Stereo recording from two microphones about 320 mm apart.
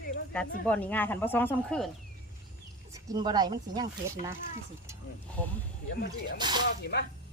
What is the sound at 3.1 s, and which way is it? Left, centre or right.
Speech, centre.